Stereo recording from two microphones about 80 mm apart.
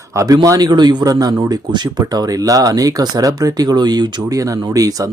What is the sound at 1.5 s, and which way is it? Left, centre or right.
Speech, right.